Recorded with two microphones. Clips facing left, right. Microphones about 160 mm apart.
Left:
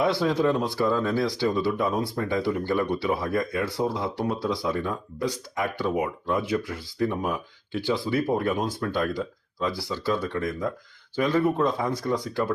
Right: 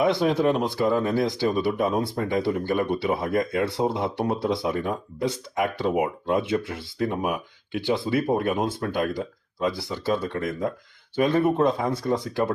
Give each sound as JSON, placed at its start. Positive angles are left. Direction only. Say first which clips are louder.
{"t": 0.0, "sound": "speech", "louder": "right 2 dB", "side_deg": -20}